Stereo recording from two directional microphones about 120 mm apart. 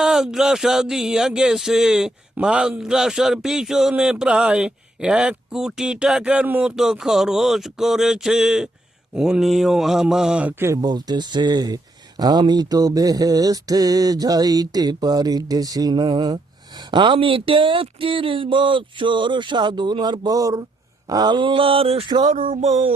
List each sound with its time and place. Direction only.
0.0 s speech: 5° right (ahead or behind)
10.8 s speech: 35° right (ahead or behind)
21.1 s a sound: 35° right (ahead or behind); by 23.0 s 60° right (ahead or behind)